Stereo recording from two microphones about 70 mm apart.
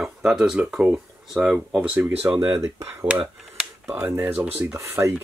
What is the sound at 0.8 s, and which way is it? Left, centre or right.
Speech, centre.